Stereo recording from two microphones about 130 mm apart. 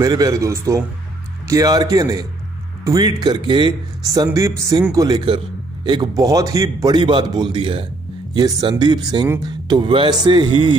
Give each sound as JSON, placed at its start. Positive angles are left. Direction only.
{"t": 0.0, "sound": "speech", "side_deg": -30}